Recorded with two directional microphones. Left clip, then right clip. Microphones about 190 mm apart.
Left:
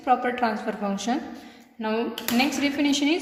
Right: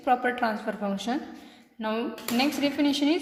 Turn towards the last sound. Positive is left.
turn(degrees=-10)  # may be behind; listen again after turning